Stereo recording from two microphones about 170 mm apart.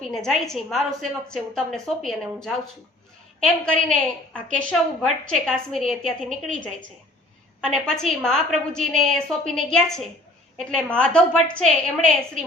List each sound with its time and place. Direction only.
0.1 s a woman's voice: centre (ahead or behind)
7.6 s a woman's voice: 5° left (ahead or behind)